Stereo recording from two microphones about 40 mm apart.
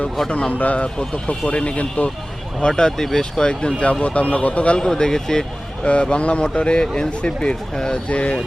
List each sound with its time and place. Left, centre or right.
0.3 s speech: left
0.6 s speech: left
2.6 s speech: centre
4.0 s speech: left
4.8 s speech: centre
5.8 s speech: left